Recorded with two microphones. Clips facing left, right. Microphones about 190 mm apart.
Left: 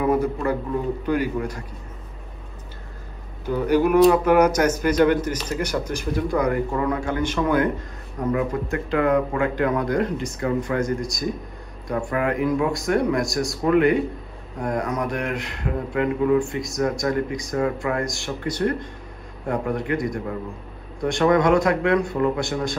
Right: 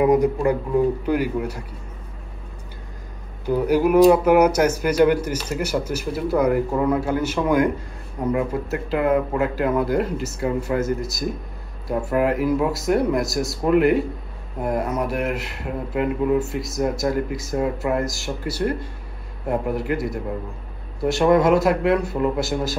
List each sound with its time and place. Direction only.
0.0 s speech: 15° right (ahead or behind)
3.4 s speech: 10° right (ahead or behind)